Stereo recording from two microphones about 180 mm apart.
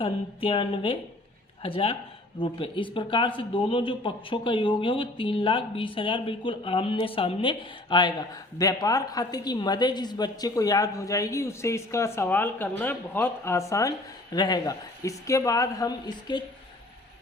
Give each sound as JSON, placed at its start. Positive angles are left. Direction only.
{"t": 0.0, "sound": "speech", "side_deg": 30}